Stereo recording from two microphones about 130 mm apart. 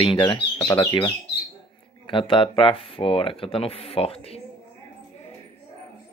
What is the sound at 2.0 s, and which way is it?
Speech, 40° left (ahead or behind).